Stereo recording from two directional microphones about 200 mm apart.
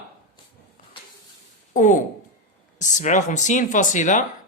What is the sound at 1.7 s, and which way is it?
Speech, 40° left (ahead or behind).